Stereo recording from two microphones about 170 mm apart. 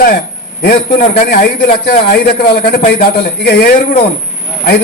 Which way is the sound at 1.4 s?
60° left (ahead or behind).